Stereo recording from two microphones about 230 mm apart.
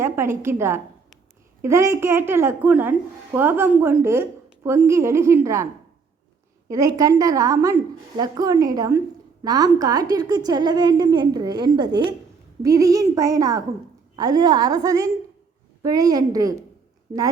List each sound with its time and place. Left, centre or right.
0.0 s a woman's voice: centre
6.7 s a woman's voice: centre